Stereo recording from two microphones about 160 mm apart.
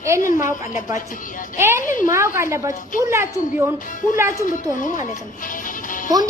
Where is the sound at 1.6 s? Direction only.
15° right (ahead or behind).